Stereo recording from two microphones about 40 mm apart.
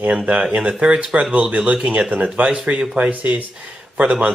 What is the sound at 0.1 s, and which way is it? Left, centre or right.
Speech, right.